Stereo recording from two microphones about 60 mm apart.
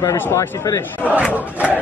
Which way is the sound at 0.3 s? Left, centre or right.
Left.